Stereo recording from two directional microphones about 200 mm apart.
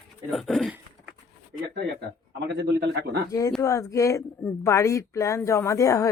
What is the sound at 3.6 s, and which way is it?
Speech, 15° left (ahead or behind).